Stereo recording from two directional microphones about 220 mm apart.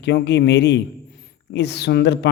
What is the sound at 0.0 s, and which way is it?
Speech, 50° left (ahead or behind).